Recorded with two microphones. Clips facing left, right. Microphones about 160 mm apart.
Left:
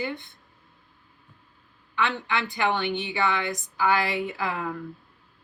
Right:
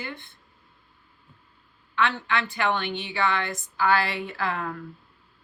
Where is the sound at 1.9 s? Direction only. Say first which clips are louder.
Right 1 dB; 15° left (ahead or behind).